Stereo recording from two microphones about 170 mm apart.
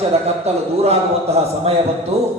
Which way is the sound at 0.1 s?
35° right (ahead or behind).